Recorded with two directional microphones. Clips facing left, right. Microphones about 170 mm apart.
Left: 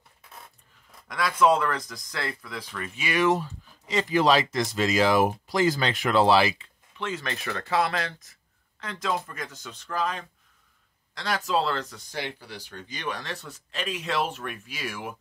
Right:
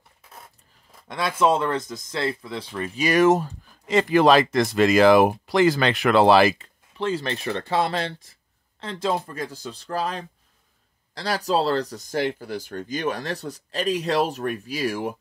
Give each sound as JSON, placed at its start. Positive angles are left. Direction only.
{"t": 1.0, "sound": "speech", "side_deg": -25}
{"t": 7.0, "sound": "speech", "side_deg": -30}